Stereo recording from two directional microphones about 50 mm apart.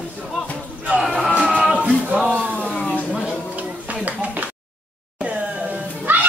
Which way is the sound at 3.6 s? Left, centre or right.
Right.